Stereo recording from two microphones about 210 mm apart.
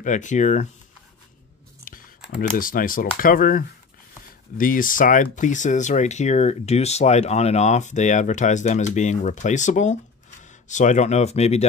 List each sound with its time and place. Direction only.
0.0 s speech: 35° left (ahead or behind)
1.9 s computer keyboard: 40° left (ahead or behind)
2.3 s speech: 40° left (ahead or behind)